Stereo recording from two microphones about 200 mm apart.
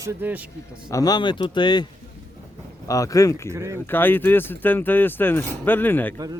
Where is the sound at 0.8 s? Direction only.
15° left (ahead or behind).